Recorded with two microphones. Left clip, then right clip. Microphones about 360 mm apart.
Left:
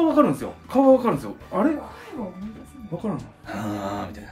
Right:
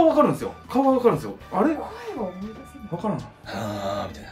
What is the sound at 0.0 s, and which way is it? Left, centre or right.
Speech, centre.